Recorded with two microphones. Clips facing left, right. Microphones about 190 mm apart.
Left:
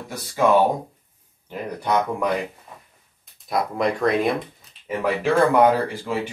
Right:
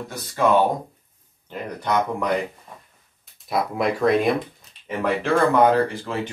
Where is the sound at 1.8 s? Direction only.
10° left (ahead or behind).